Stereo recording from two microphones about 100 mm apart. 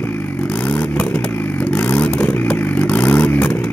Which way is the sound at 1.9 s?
10° left (ahead or behind).